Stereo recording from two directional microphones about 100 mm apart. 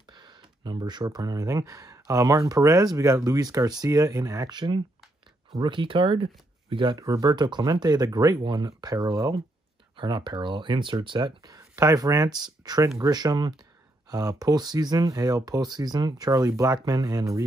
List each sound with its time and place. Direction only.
0.0 s speech: 50° right (ahead or behind)
4.5 s speech: 50° right (ahead or behind)
7.0 s speech: 40° right (ahead or behind)
9.9 s speech: 50° right (ahead or behind); by 13.1 s 30° right (ahead or behind)
13.1 s speech: 40° right (ahead or behind)